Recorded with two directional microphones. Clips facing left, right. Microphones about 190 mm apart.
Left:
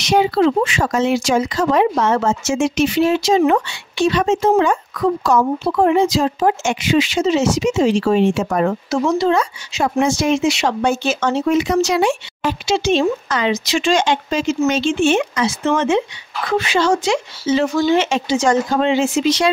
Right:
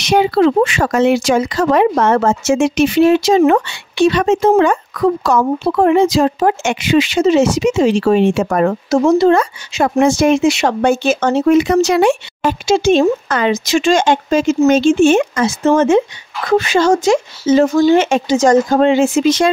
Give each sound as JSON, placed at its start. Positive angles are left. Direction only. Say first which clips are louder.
{"t": 0.0, "sound": "speech", "louder": "right 3 dB", "side_deg": -60}